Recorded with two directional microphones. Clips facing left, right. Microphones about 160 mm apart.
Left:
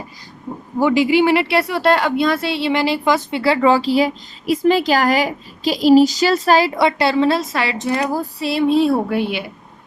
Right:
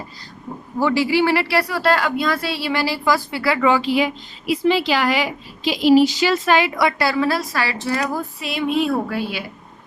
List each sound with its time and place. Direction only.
0.8 s a woman's voice: 15° left (ahead or behind)
8.1 s music: 35° left (ahead or behind)
9.0 s a woman's voice: 25° left (ahead or behind)